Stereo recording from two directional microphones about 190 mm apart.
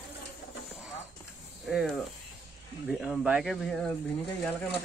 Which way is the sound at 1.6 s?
Centre (ahead or behind).